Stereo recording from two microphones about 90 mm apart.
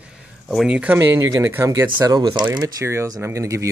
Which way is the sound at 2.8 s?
30° right (ahead or behind).